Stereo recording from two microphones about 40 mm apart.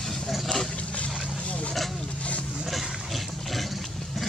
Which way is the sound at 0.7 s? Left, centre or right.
Left.